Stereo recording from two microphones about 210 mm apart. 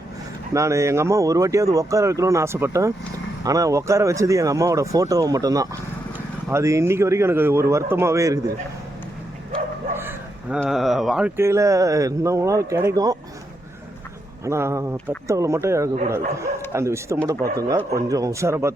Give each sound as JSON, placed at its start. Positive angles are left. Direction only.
{"t": 0.5, "sound": "speech", "side_deg": -15}
{"t": 10.0, "sound": "a sound", "side_deg": -10}
{"t": 10.6, "sound": "speech", "side_deg": 0}
{"t": 14.4, "sound": "speech", "side_deg": -15}